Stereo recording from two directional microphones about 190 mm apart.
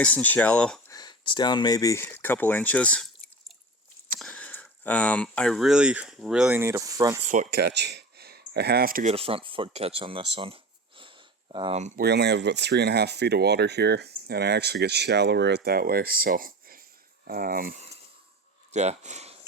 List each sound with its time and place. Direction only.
0.0 s speech: 5° left (ahead or behind)
0.9 s speech: 20° left (ahead or behind)
4.2 s speech: 5° left (ahead or behind); by 7.2 s 20° right (ahead or behind)
7.3 s speech: 50° right (ahead or behind)
9.1 s speech: 30° right (ahead or behind)
11.8 s speech: 40° right (ahead or behind)
12.0 s speech: 60° right (ahead or behind); by 19.4 s 35° right (ahead or behind)